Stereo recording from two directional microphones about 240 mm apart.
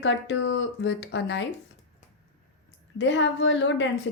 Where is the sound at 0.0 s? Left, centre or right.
Left.